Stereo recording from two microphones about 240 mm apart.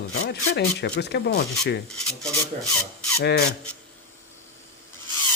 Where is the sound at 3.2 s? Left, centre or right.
Left.